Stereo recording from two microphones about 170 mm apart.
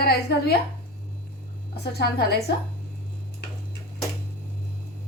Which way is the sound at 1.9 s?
70° left (ahead or behind).